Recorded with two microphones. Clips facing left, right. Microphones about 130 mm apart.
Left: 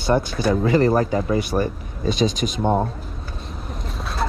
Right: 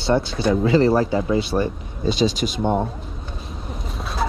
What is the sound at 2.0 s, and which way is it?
Speech, 45° left (ahead or behind).